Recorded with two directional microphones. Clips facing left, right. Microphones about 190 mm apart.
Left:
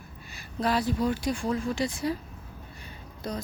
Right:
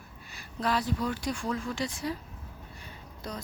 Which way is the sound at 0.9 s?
25° left (ahead or behind).